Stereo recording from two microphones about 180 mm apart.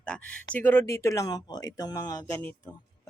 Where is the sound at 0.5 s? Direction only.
10° left (ahead or behind).